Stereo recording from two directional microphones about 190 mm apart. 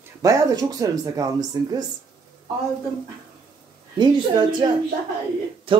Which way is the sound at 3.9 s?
25° right (ahead or behind).